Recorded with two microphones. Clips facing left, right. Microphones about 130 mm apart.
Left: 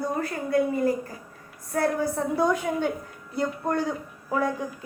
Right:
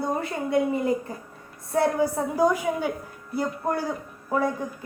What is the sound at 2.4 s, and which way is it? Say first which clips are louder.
A woman's voice: right 3 dB; 10° right (ahead or behind).